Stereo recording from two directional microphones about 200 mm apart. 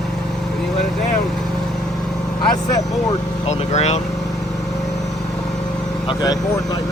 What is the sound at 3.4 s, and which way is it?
Speech, 35° left (ahead or behind).